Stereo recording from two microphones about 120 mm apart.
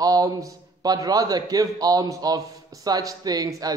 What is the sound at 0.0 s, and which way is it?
A man's voice, 30° right (ahead or behind).